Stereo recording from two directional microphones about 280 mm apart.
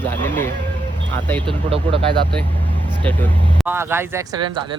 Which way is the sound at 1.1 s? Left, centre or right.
Centre.